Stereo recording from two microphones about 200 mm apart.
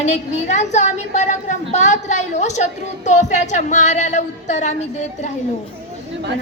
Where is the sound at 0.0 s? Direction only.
35° left (ahead or behind).